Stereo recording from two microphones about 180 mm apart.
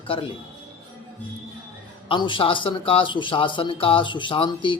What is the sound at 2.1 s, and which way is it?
Speech, 25° left (ahead or behind).